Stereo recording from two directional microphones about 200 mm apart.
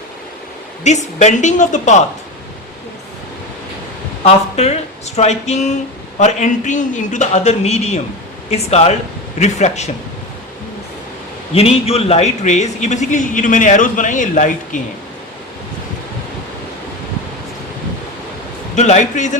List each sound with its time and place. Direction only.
0.9 s a man's voice: 35° left (ahead or behind)
4.2 s a man's voice: 30° left (ahead or behind)
11.5 s a man's voice: 30° left (ahead or behind)
18.8 s a man's voice: 35° left (ahead or behind)